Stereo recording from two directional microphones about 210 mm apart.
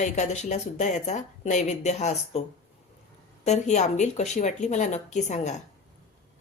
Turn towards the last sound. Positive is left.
turn(degrees=35)  # may be behind; listen again after turning